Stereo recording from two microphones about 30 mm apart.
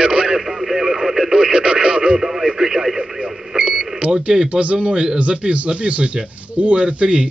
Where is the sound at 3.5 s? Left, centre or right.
Right.